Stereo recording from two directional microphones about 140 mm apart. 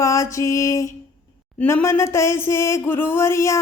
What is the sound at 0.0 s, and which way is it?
Music, 20° left (ahead or behind).